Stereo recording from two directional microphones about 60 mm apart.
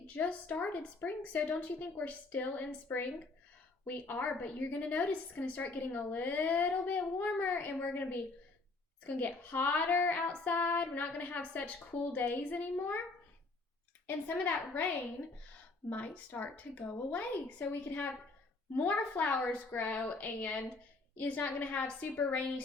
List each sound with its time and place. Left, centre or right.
0.2 s a woman's voice: left
14.3 s speech: left
15.9 s a woman's voice: left